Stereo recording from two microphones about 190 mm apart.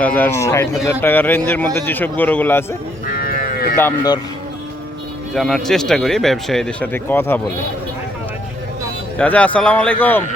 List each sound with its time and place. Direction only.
0.0 s a man's voice: 10° left (ahead or behind)
3.2 s sheep: 50° left (ahead or behind)
3.8 s a man's voice: 10° left (ahead or behind)
5.3 s speech: centre (ahead or behind)
9.1 s a man's voice: 5° left (ahead or behind)